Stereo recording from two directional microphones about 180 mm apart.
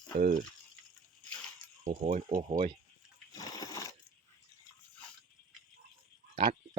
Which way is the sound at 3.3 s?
20° left (ahead or behind).